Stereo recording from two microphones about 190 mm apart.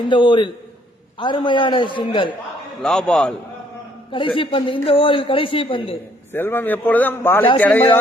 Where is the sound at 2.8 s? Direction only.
5° left (ahead or behind).